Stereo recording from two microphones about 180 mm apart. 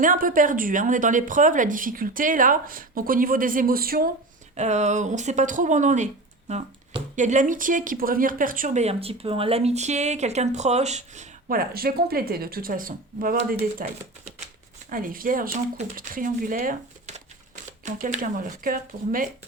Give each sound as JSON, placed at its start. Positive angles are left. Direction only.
{"t": 0.0, "sound": "speech", "side_deg": -50}
{"t": 4.5, "sound": "speech", "side_deg": -40}